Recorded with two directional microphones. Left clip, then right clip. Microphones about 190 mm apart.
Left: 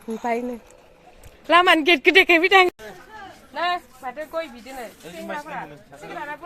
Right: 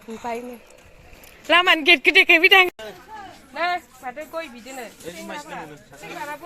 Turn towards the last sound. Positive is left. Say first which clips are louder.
# even
turn(degrees=0)  # may be behind; listen again after turning